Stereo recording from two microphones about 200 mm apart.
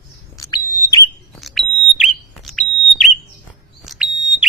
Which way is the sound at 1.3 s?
Centre (ahead or behind).